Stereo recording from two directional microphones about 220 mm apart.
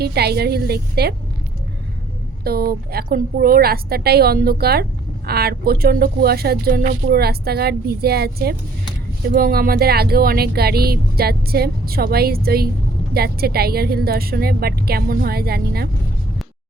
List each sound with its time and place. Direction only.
0.0 s a woman's voice: 45° right (ahead or behind)
2.4 s a woman's voice: 45° right (ahead or behind)